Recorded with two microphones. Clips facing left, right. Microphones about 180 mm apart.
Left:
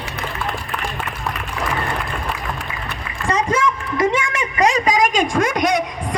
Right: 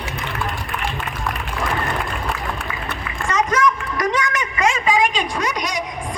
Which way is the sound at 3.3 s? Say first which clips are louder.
Even; 30° left (ahead or behind).